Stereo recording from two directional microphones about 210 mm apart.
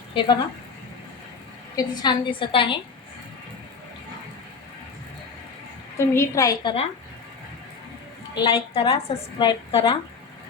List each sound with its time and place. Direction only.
0.1 s a woman's voice: 20° left (ahead or behind)
1.7 s a woman's voice: 20° left (ahead or behind)
6.1 s a woman's voice: 15° left (ahead or behind)
8.4 s a woman's voice: 20° left (ahead or behind)